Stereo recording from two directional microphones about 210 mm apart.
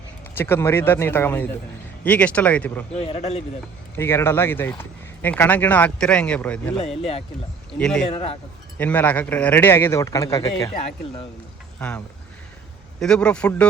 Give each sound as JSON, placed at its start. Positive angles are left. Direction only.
{"t": 0.3, "sound": "speech", "side_deg": 10}
{"t": 2.9, "sound": "a man's voice", "side_deg": 30}
{"t": 3.9, "sound": "speech", "side_deg": 10}
{"t": 7.8, "sound": "a man's voice", "side_deg": 5}
{"t": 8.1, "sound": "a man's voice", "side_deg": 25}
{"t": 8.8, "sound": "speech", "side_deg": 10}
{"t": 11.8, "sound": "a man's voice", "side_deg": 5}